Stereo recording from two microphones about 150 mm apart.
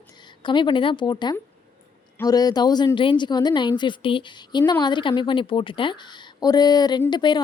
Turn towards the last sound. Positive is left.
turn(degrees=30)  # may be behind; listen again after turning